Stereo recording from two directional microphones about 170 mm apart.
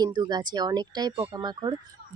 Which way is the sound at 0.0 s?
25° right (ahead or behind).